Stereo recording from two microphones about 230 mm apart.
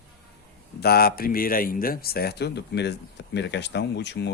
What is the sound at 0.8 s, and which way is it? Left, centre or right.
Speech, left.